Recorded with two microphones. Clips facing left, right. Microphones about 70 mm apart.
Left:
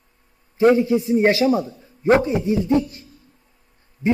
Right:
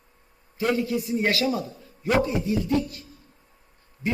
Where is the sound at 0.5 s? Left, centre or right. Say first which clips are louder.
Left 9 dB; left.